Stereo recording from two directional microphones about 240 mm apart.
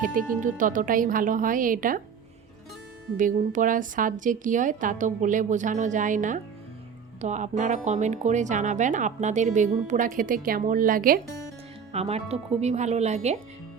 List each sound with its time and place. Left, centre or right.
0.0 s speech: right
3.2 s speech: right